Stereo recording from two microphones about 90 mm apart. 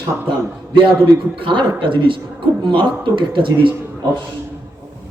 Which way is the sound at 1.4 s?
65° right (ahead or behind).